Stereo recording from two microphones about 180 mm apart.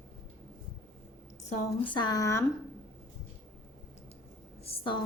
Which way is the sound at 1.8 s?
25° left (ahead or behind).